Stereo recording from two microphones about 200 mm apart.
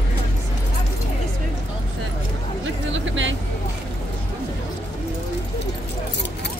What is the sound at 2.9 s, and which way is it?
Vehicle, 70° right (ahead or behind).